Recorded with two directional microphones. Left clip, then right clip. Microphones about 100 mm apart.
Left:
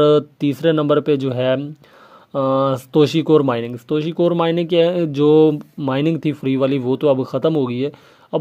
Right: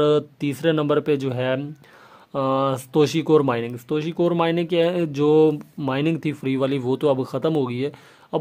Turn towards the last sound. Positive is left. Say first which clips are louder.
# left 4 dB
turn(degrees=30)  # may be behind; listen again after turning